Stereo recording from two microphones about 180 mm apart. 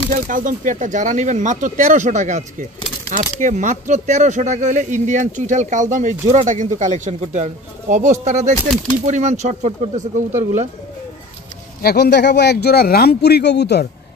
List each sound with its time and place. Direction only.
0.1 s speech: 45° right (ahead or behind)
11.8 s a man's voice: 65° left (ahead or behind)